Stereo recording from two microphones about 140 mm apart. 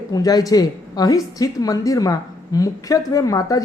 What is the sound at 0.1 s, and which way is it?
A woman's voice, 25° left (ahead or behind).